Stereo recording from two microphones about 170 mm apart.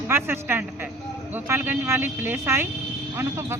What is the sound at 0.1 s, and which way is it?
A woman's voice, 15° right (ahead or behind).